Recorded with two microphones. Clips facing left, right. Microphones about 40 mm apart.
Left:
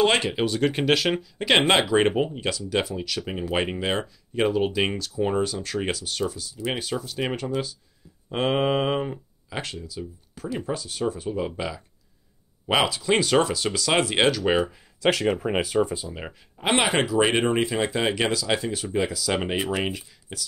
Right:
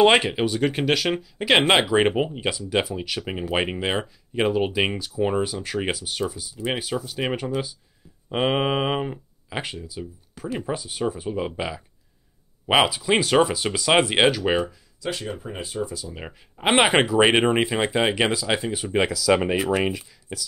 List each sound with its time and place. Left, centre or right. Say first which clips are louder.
0.0 s speech: right 4 dB; centre
15.0 s speech: left 8 dB; left
16.3 s speech: right 4 dB; right